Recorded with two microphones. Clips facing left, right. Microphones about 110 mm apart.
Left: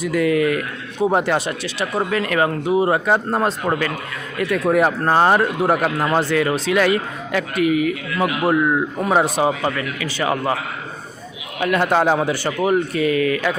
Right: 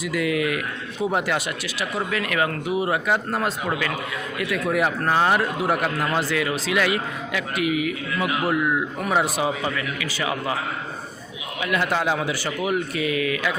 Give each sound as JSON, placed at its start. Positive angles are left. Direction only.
{"t": 0.0, "sound": "a man's voice", "side_deg": 45}
{"t": 11.6, "sound": "a man's voice", "side_deg": 50}